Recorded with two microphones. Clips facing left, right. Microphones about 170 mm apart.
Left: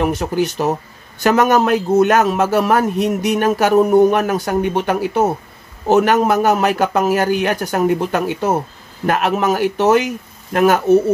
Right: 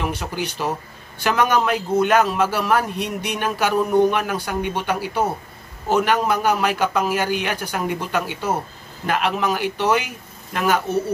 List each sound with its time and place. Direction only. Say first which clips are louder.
0.0 s a man's voice: left 8 dB; 45° left (ahead or behind)